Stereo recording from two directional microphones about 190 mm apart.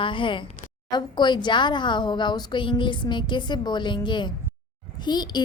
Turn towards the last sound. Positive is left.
turn(degrees=20)  # may be behind; listen again after turning